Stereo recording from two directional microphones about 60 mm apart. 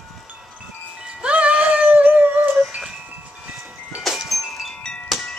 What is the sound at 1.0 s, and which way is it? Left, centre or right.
Music, centre.